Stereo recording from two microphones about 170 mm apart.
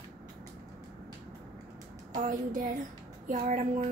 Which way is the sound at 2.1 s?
50° right (ahead or behind).